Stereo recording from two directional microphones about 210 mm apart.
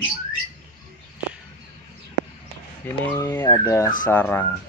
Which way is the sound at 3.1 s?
15° left (ahead or behind).